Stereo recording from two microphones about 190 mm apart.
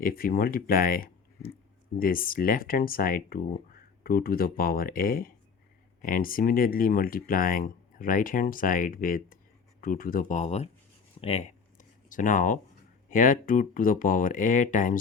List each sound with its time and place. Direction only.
0.0 s speech: 50° left (ahead or behind)
11.2 s a sound: 35° left (ahead or behind)
13.1 s speech: 45° left (ahead or behind)